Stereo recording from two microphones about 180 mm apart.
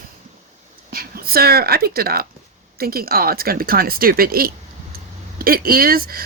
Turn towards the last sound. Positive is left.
turn(degrees=-55)  # may be behind; listen again after turning